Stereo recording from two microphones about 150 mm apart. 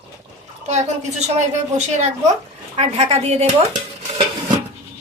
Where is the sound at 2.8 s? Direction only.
45° right (ahead or behind).